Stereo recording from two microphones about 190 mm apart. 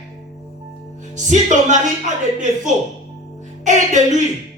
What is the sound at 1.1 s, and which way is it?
Speech, 40° right (ahead or behind).